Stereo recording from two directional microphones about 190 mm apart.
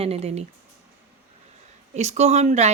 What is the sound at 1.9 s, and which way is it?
Speech, 35° right (ahead or behind).